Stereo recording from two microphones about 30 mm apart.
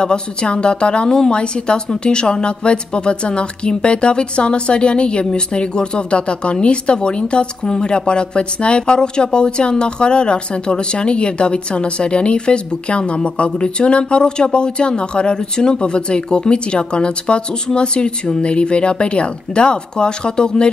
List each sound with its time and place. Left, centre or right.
0.0 s speech: left